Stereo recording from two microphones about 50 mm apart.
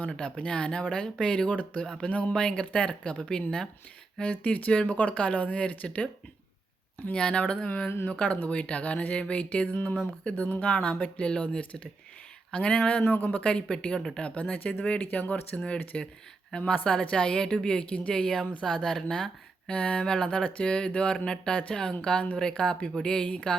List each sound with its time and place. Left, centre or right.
0.1 s speech: left
1.8 s speech: centre
2.0 s speech: left
4.2 s speech: left
7.1 s speech: centre
10.3 s speech: left
12.5 s speech: centre
13.1 s speech: left; by 14.3 s centre
14.5 s speech: left
18.1 s speech: centre